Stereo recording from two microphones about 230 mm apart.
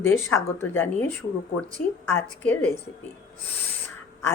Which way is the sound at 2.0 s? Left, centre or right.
Centre.